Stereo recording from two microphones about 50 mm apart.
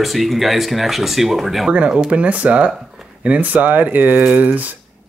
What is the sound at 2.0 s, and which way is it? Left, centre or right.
Speech, right.